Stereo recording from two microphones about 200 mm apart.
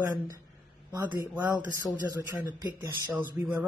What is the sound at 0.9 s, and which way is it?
A man's voice, 20° right (ahead or behind).